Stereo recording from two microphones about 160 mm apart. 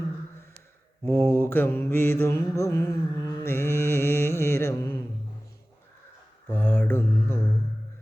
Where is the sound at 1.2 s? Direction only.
15° left (ahead or behind).